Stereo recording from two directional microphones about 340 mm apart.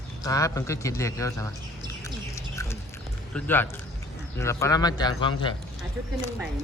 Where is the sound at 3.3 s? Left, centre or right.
Centre.